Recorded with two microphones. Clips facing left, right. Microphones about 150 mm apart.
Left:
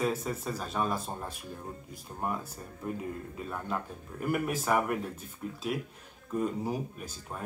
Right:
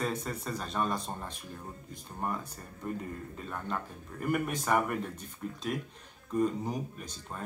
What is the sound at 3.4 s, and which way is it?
Speech, 5° left (ahead or behind).